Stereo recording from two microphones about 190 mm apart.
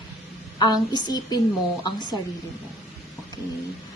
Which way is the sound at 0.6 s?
20° left (ahead or behind).